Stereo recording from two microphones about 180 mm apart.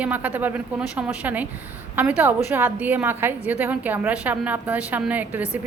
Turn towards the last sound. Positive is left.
turn(degrees=-10)  # may be behind; listen again after turning